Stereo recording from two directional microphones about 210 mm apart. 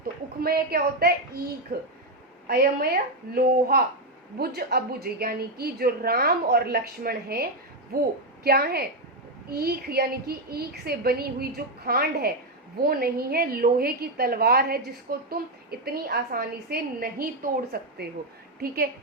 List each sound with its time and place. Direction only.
0.0 s a woman's voice: 45° right (ahead or behind)
8.4 s a woman's voice: 50° right (ahead or behind)